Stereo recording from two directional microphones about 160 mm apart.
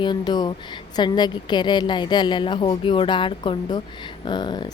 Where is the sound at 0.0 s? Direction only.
30° left (ahead or behind).